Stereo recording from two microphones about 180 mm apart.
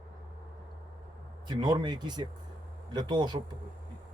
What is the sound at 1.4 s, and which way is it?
Speech, 25° right (ahead or behind).